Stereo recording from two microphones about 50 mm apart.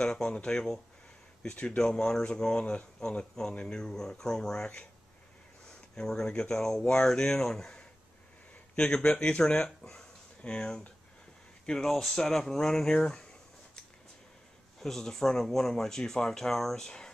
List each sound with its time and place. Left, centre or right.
0.0 s speech: centre
14.8 s speech: centre